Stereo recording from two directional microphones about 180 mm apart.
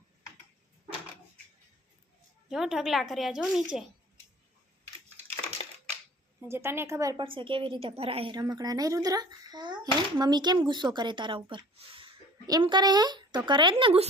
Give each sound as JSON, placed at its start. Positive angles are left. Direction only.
{"t": 2.5, "sound": "speech", "side_deg": -5}
{"t": 5.6, "sound": "crushing", "side_deg": 30}
{"t": 6.5, "sound": "a woman's voice", "side_deg": -15}